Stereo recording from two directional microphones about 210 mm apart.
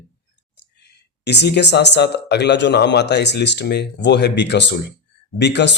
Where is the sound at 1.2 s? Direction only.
55° left (ahead or behind).